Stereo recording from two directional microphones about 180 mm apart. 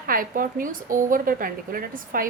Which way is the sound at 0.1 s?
50° right (ahead or behind).